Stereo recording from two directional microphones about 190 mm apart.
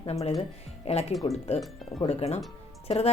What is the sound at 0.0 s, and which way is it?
Speech, 30° left (ahead or behind).